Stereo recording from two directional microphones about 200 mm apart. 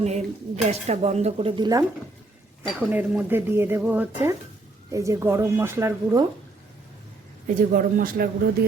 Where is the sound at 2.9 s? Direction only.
10° right (ahead or behind).